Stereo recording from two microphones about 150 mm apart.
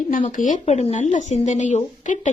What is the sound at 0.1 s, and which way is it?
Speech, 55° left (ahead or behind).